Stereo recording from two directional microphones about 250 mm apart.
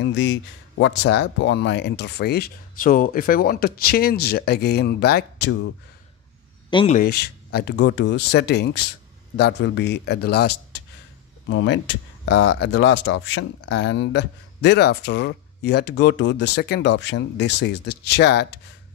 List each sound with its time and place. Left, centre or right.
0.0 s speech: left
6.7 s speech: centre
7.0 s speech: left